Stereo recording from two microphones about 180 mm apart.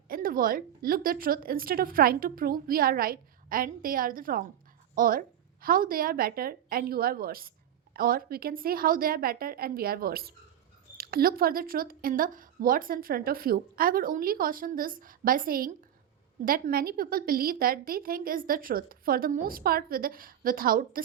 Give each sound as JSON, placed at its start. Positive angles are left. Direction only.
{"t": 0.1, "sound": "a woman's voice", "side_deg": -55}